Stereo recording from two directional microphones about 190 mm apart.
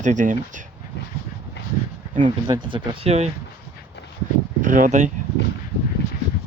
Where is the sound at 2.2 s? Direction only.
25° right (ahead or behind).